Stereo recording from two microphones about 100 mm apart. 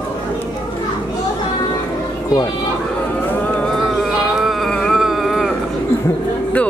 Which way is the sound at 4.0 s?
Centre (ahead or behind).